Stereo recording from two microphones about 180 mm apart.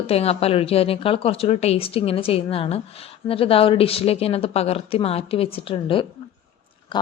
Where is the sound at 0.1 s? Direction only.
35° left (ahead or behind).